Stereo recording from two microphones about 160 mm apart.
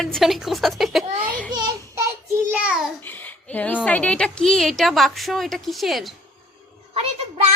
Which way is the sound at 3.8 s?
10° left (ahead or behind).